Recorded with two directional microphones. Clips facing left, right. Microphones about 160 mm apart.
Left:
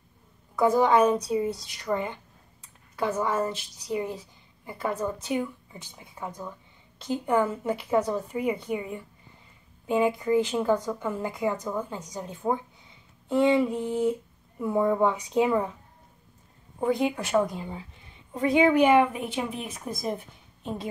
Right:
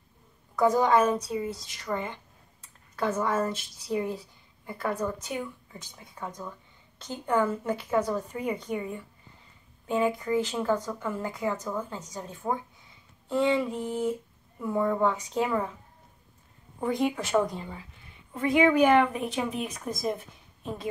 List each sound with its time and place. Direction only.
0.6 s a woman's voice: 10° left (ahead or behind)
16.8 s a woman's voice: 10° left (ahead or behind)
18.7 s a woman's voice: 10° left (ahead or behind)